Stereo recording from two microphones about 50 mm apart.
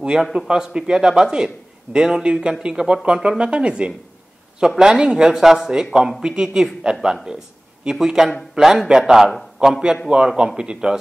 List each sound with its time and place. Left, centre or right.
0.0 s a man's voice: centre